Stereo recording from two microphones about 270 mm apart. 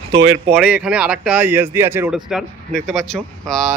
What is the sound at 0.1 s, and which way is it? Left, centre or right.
Speech, right.